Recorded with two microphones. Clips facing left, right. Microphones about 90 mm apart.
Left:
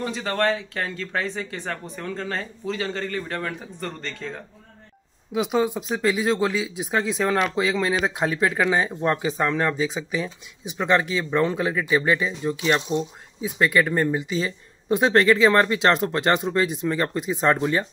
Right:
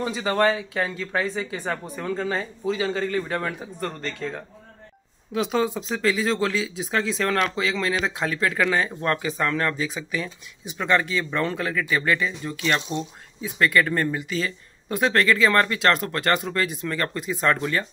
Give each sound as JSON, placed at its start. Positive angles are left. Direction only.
{"t": 0.0, "sound": "speech", "side_deg": -10}
{"t": 5.3, "sound": "speech", "side_deg": 15}